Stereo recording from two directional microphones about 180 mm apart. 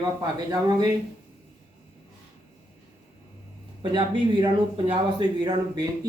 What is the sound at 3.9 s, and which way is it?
Speech, 25° right (ahead or behind).